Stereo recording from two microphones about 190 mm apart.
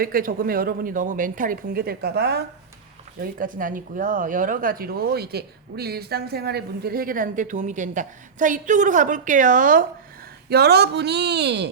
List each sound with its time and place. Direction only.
0.0 s speech: 50° right (ahead or behind)
3.2 s speech: 45° right (ahead or behind)
10.5 s speech: 60° right (ahead or behind)